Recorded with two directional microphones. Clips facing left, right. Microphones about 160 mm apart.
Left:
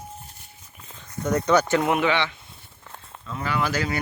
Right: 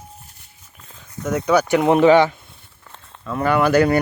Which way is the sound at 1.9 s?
35° right (ahead or behind).